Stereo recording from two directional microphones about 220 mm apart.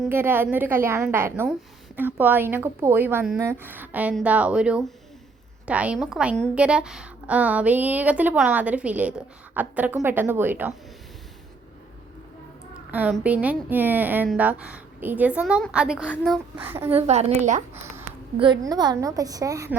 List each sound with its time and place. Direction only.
0.0 s a woman's voice: 10° right (ahead or behind)
12.9 s a child's voice: 5° right (ahead or behind)
16.9 s a woman's voice: 30° right (ahead or behind)
18.6 s a woman's voice: 20° right (ahead or behind)